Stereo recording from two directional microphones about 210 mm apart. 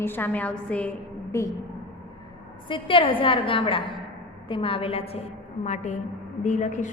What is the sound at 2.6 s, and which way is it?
A woman's voice, 25° left (ahead or behind).